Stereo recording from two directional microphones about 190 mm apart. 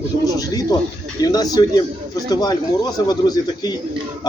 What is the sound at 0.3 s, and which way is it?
A man's voice, 20° left (ahead or behind).